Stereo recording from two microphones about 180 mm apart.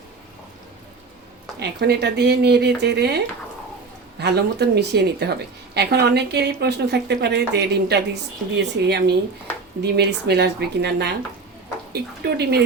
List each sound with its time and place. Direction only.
1.5 s speech: 65° right (ahead or behind)
4.2 s a woman's voice: 65° right (ahead or behind)